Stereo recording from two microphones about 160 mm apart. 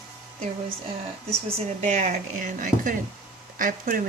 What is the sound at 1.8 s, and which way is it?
Speech, 45° right (ahead or behind).